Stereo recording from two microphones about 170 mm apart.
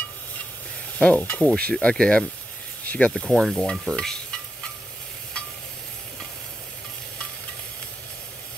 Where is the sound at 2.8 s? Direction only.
5° left (ahead or behind).